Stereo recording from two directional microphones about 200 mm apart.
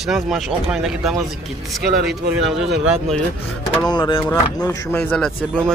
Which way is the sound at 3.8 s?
20° left (ahead or behind).